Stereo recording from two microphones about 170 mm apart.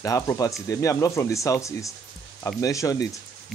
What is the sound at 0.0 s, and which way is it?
Speech, 20° left (ahead or behind).